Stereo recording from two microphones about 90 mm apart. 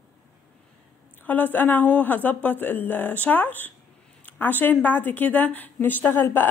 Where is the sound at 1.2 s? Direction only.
20° left (ahead or behind).